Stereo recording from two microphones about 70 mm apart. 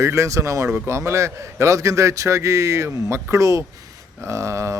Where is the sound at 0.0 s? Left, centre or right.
Right.